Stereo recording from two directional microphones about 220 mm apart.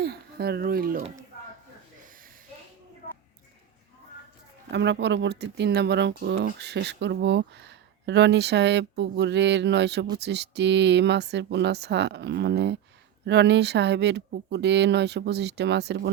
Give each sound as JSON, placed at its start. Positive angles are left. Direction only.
{"t": 0.0, "sound": "speech", "side_deg": -45}
{"t": 4.7, "sound": "speech", "side_deg": -50}